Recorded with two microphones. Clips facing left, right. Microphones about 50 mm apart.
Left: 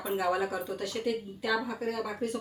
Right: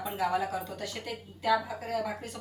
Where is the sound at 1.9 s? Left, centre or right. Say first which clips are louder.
Right 3 dB; centre.